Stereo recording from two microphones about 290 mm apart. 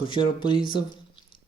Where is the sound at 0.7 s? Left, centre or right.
Centre.